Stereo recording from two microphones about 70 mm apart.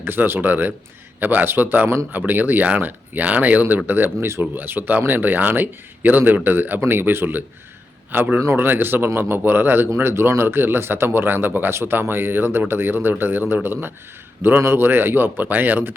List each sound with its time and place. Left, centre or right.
0.0 s speech: right